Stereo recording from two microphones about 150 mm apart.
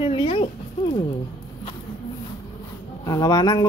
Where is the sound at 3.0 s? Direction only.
25° left (ahead or behind).